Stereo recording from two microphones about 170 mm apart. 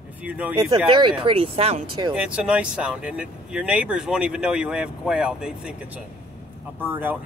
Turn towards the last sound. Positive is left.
turn(degrees=-10)  # may be behind; listen again after turning